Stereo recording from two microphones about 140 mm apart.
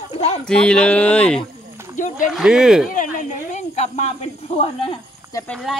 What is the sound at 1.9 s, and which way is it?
Speech, 65° left (ahead or behind).